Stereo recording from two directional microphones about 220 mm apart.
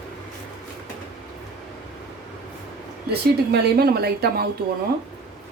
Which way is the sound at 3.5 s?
45° right (ahead or behind).